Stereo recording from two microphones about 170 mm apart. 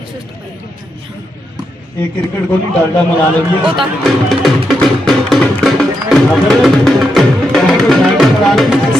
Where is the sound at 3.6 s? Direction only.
Centre (ahead or behind).